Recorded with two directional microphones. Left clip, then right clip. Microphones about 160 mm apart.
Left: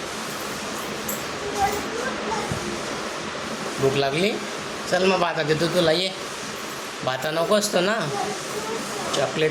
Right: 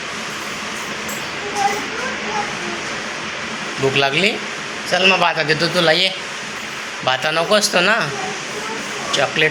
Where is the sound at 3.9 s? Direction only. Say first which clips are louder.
Right 6 dB; centre (ahead or behind).